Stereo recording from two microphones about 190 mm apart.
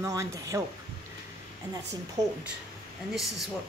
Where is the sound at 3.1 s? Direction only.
Centre (ahead or behind).